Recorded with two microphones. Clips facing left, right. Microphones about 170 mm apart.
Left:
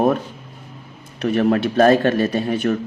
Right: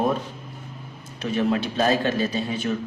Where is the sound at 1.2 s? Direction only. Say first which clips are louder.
Left 6 dB; 55° left (ahead or behind).